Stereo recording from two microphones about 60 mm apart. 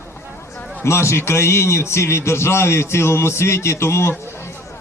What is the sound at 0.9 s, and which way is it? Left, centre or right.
A man's voice, left.